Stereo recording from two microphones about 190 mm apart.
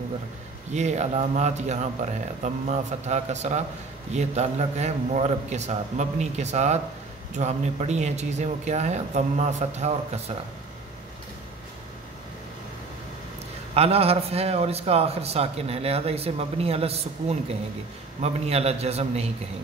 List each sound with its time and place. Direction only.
0.7 s a man's voice: 35° right (ahead or behind)
13.7 s a man's voice: 30° right (ahead or behind)